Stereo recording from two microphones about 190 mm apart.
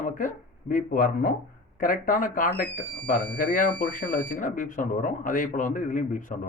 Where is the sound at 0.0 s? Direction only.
40° left (ahead or behind).